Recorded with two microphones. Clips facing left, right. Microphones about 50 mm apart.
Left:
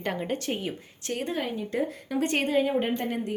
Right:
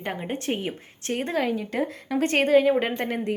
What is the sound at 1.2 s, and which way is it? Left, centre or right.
Speech, right.